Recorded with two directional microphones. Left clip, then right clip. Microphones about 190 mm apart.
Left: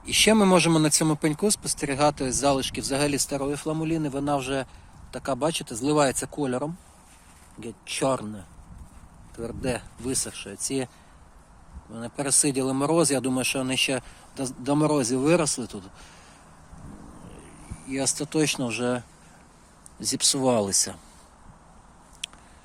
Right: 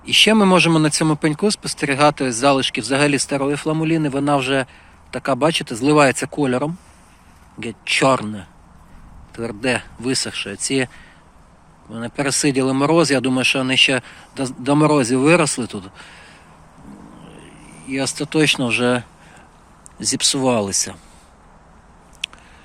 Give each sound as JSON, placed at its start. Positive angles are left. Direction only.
{"t": 0.0, "sound": "speech", "side_deg": 5}
{"t": 11.9, "sound": "speech", "side_deg": 0}
{"t": 17.4, "sound": "speech", "side_deg": 10}
{"t": 22.2, "sound": "a sound", "side_deg": 15}